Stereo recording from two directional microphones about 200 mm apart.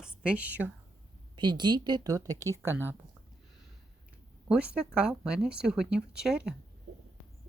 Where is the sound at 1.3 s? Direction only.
20° right (ahead or behind).